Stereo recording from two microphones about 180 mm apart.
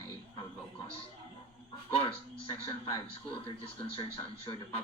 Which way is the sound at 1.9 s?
30° left (ahead or behind).